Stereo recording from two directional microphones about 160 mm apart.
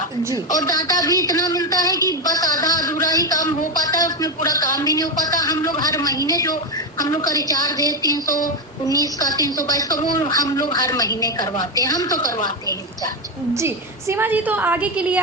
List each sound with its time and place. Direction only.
0.5 s speech: 25° left (ahead or behind)
13.5 s a woman's voice: 15° right (ahead or behind)